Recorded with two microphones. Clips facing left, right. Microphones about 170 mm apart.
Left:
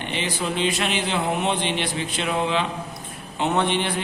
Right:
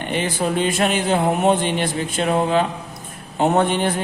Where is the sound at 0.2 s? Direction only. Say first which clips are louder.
Right 4 dB; 50° right (ahead or behind).